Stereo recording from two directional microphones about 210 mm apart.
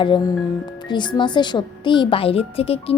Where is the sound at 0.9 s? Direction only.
20° left (ahead or behind).